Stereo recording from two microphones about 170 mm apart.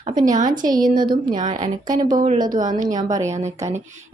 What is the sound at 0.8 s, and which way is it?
Speech, 55° right (ahead or behind).